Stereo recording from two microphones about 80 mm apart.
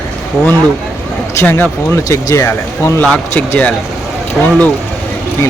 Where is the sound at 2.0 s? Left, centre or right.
Left.